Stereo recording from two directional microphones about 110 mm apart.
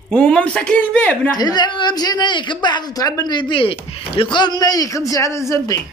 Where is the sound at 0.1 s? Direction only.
10° left (ahead or behind).